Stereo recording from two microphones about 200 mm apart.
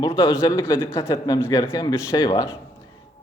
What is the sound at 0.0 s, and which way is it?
A man's voice, 20° left (ahead or behind).